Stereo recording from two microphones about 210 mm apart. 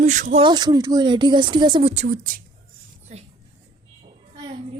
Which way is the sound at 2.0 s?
45° right (ahead or behind).